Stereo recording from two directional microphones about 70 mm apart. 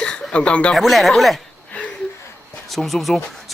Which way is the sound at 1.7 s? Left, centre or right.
Left.